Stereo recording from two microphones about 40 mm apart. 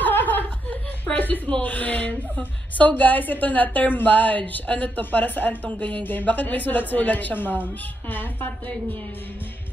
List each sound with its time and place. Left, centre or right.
0.0 s chuckle: left
1.1 s a sound: left
1.6 s a woman's voice: left